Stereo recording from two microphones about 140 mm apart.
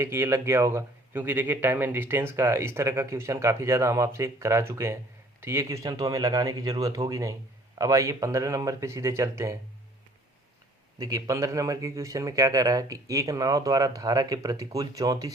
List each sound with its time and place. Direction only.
0.0 s a man's voice: 20° right (ahead or behind)
11.0 s a man's voice: 25° right (ahead or behind)